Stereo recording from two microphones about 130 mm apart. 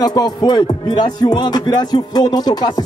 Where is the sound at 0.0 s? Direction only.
30° left (ahead or behind).